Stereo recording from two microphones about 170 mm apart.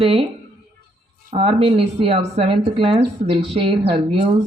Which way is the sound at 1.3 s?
35° right (ahead or behind).